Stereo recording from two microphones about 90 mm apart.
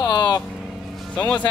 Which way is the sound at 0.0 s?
50° left (ahead or behind).